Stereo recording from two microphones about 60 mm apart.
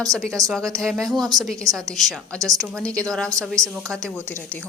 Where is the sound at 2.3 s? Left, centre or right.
Right.